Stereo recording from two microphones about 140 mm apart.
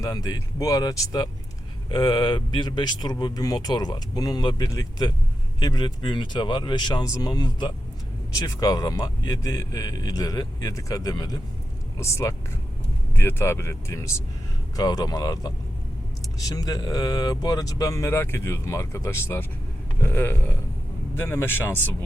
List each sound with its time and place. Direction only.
0.0 s speech: 25° left (ahead or behind)